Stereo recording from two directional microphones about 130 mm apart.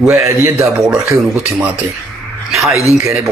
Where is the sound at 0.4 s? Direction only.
25° right (ahead or behind).